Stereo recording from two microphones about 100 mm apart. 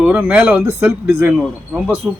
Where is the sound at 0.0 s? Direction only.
10° right (ahead or behind).